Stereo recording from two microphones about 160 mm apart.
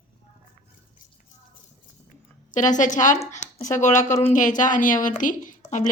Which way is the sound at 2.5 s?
50° left (ahead or behind).